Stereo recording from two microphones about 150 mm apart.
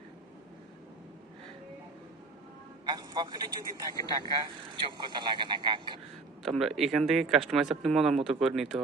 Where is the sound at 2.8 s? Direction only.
30° right (ahead or behind).